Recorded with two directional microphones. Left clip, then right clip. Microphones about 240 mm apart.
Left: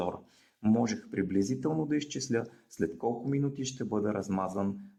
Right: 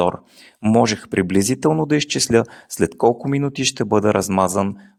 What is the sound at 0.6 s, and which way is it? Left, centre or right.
Speech, right.